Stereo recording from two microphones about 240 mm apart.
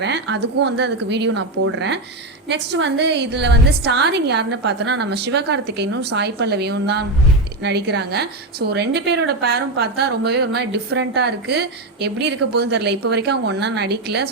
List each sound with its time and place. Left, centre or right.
0.0 s a woman's voice: right